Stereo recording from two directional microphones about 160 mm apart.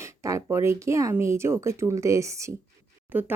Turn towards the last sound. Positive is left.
turn(degrees=-10)  # may be behind; listen again after turning